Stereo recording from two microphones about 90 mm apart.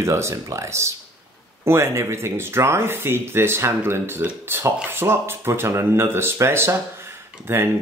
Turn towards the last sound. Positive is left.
turn(degrees=-30)  # may be behind; listen again after turning